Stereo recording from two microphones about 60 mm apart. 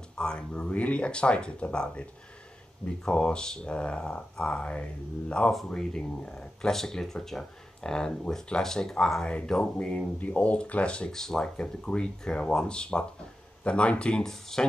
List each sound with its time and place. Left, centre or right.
0.2 s speech: centre
3.1 s speech: centre